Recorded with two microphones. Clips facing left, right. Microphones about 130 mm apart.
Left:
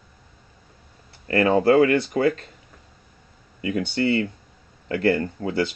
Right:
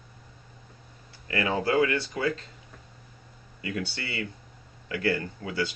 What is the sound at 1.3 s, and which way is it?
Speech, 40° left (ahead or behind).